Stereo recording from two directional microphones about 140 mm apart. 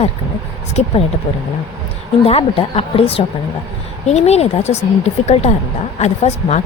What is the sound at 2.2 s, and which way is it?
Speech, 45° left (ahead or behind).